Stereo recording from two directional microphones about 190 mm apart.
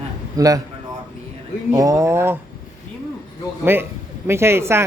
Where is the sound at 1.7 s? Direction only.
15° right (ahead or behind).